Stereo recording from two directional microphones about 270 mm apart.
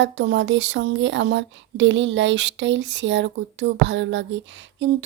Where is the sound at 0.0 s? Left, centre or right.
Right.